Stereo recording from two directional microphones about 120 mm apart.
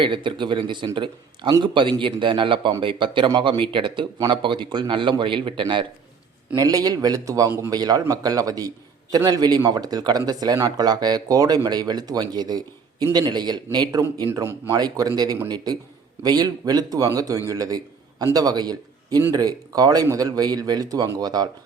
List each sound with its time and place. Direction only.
0.0 s speech: 45° right (ahead or behind)
6.6 s a man's voice: 30° right (ahead or behind)